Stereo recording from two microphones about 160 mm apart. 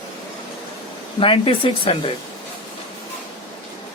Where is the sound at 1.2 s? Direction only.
35° left (ahead or behind).